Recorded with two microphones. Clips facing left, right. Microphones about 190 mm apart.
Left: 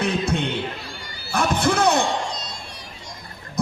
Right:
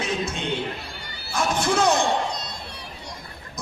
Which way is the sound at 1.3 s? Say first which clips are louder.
Left 2 dB; 60° left (ahead or behind).